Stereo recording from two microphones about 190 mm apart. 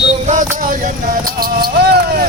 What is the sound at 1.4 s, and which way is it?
Speech, 55° right (ahead or behind).